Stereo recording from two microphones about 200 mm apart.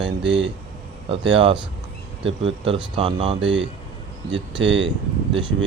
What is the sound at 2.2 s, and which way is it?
Speech, 25° right (ahead or behind).